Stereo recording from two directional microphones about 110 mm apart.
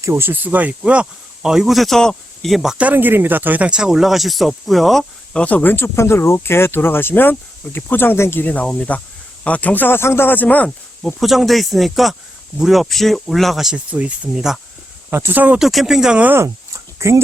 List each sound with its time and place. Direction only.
0.0 s speech: 25° right (ahead or behind); by 11.1 s 15° left (ahead or behind)
11.2 s speech: centre (ahead or behind)
15.1 s speech: 20° right (ahead or behind)
15.5 s speech: centre (ahead or behind)
16.4 s a sound: 25° right (ahead or behind)